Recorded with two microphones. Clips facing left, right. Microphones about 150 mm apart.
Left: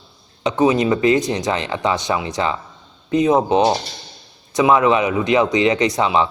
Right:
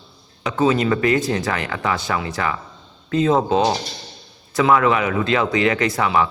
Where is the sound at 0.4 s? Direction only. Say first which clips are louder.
Left 2 dB; 20° left (ahead or behind).